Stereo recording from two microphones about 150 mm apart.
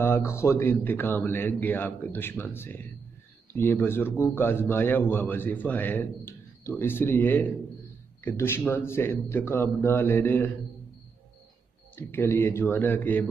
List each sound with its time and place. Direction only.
0.0 s a man's voice: 15° left (ahead or behind)
11.9 s a man's voice: 15° left (ahead or behind)